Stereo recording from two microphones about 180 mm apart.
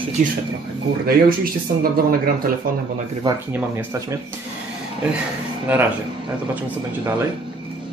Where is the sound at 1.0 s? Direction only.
55° right (ahead or behind).